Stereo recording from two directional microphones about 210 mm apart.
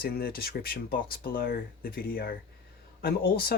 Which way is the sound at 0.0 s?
45° left (ahead or behind).